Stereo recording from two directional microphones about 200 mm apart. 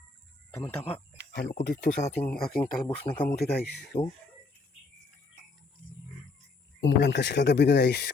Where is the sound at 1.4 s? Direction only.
55° left (ahead or behind).